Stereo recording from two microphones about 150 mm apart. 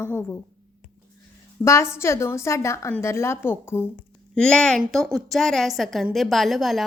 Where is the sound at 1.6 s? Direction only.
20° left (ahead or behind).